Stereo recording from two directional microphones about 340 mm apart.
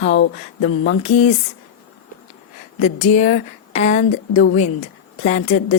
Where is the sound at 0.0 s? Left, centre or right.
Left.